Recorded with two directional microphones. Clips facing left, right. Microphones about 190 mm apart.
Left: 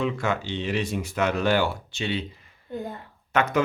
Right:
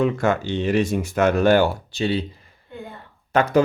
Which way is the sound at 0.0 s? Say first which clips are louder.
Right 6 dB; 45° right (ahead or behind).